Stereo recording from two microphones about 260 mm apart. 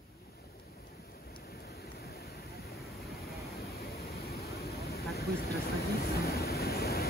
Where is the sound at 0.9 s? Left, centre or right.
Left.